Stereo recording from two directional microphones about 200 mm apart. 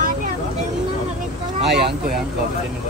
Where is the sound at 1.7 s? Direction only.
55° right (ahead or behind).